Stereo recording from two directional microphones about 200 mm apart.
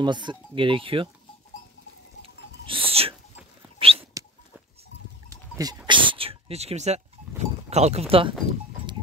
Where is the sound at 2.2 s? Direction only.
25° right (ahead or behind).